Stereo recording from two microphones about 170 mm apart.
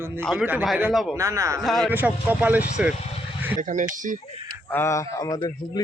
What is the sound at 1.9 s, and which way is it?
Speech, 10° right (ahead or behind).